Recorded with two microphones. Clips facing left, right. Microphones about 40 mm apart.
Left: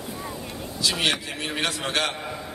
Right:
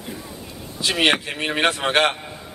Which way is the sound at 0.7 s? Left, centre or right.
Right.